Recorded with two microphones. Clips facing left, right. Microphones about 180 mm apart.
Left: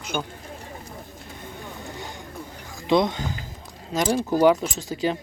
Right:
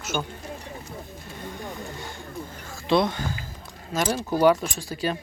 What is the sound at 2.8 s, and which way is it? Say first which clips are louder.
Speech: left 1 dB; 20° left (ahead or behind).